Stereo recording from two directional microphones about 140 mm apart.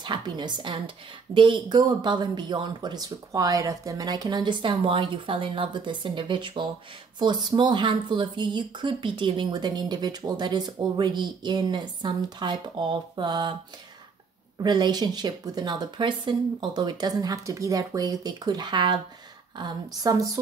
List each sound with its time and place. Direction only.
0.0 s a woman's voice: 30° right (ahead or behind)
14.6 s a woman's voice: 30° right (ahead or behind)
20.0 s a sound: 25° right (ahead or behind)